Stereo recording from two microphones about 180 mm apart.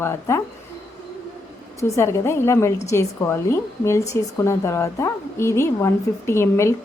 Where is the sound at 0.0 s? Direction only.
15° left (ahead or behind).